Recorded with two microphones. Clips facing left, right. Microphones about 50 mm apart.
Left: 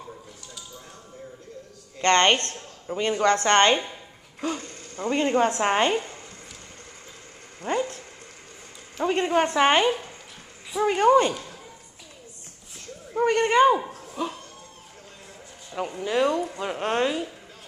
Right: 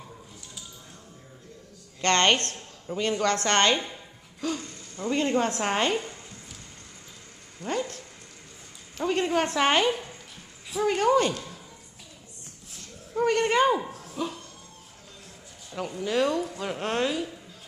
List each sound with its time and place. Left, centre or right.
2.0 s a woman's voice: centre
4.4 s speech: left
5.2 s a woman's voice: centre
7.6 s speech: left
9.0 s a woman's voice: centre
13.2 s a woman's voice: centre
16.0 s a woman's voice: centre